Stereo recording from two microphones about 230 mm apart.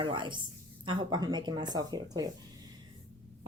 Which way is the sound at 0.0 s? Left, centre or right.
Right.